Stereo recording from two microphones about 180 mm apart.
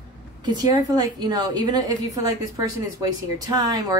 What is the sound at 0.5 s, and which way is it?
Speech, 25° right (ahead or behind).